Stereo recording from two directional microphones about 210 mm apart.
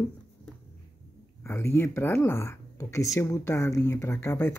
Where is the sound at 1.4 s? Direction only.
10° left (ahead or behind).